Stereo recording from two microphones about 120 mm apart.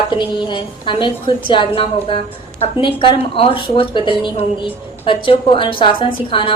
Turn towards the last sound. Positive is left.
turn(degrees=45)  # may be behind; listen again after turning